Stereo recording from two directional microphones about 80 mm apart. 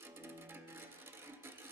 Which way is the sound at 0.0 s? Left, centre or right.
Right.